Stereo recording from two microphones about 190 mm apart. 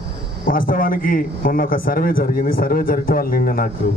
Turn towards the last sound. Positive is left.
turn(degrees=50)  # may be behind; listen again after turning